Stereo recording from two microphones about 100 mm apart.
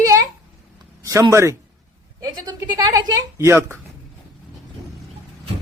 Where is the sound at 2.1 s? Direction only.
40° right (ahead or behind).